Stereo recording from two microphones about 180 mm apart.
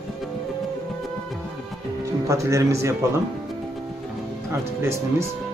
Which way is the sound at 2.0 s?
15° right (ahead or behind).